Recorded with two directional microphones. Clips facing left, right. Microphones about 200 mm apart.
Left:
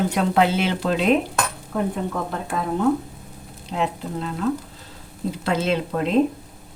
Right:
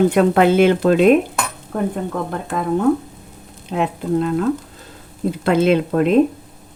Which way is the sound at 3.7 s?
55° right (ahead or behind).